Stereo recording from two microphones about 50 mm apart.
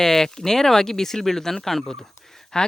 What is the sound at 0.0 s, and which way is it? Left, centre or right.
Speech, centre.